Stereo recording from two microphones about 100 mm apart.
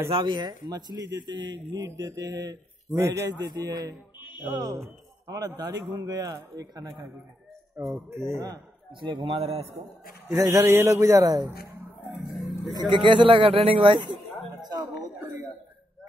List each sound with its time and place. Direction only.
0.1 s a man's voice: 50° right (ahead or behind); by 3.3 s 25° right (ahead or behind)
3.3 s a man's voice: 40° right (ahead or behind)
7.7 s speech: 25° right (ahead or behind)
9.2 s a man's voice: 75° right (ahead or behind)
10.3 s a man's voice: 35° right (ahead or behind)
12.7 s a man's voice: 55° right (ahead or behind)
14.6 s a sound: 40° right (ahead or behind)